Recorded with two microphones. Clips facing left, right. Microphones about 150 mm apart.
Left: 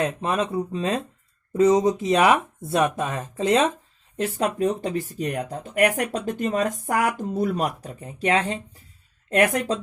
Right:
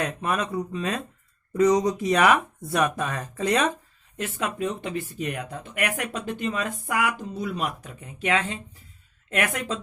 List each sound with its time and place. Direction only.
0.0 s speech: 25° left (ahead or behind)
4.2 s speech: 35° left (ahead or behind)